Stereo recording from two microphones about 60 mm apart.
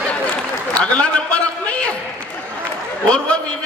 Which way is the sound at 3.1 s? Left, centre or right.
Centre.